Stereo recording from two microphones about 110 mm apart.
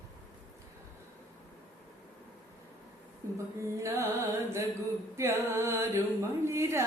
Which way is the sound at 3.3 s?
25° right (ahead or behind).